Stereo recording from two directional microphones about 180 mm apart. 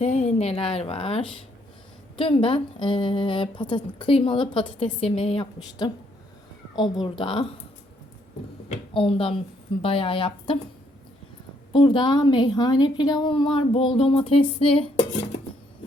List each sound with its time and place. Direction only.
0.0 s a woman's voice: 35° left (ahead or behind)
8.9 s a woman's voice: 30° left (ahead or behind)
11.7 s a woman's voice: 25° left (ahead or behind)